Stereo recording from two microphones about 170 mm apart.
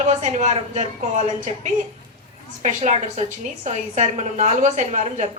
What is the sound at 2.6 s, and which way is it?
A woman's voice, 40° right (ahead or behind).